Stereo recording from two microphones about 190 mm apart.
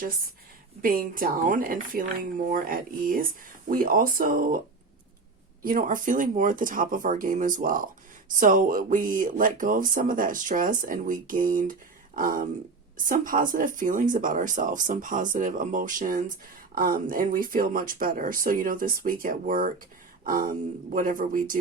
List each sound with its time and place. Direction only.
0.8 s speech: 50° right (ahead or behind)
5.6 s speech: 45° right (ahead or behind)